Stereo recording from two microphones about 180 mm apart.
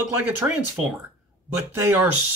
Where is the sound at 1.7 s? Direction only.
10° right (ahead or behind).